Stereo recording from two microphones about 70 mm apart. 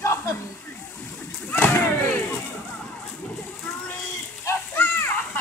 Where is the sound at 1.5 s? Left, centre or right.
Left.